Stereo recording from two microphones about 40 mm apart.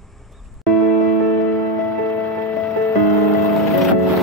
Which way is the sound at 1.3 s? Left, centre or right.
Left.